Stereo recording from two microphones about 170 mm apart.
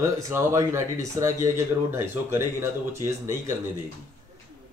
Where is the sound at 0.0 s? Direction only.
15° right (ahead or behind).